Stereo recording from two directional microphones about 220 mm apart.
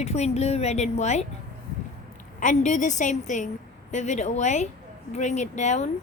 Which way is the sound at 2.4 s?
35° left (ahead or behind).